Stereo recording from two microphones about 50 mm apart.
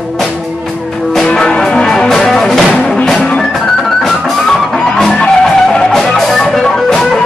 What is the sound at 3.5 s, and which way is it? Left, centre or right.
Music, centre.